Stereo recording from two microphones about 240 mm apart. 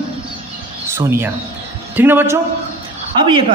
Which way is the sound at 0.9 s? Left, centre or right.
Centre.